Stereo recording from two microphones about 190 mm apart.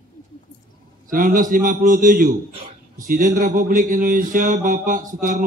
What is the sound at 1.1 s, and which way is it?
A man's voice, 45° right (ahead or behind).